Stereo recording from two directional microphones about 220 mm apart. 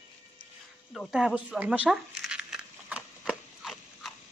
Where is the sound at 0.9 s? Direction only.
5° right (ahead or behind).